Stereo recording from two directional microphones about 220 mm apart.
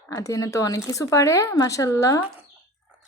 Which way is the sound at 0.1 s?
15° left (ahead or behind).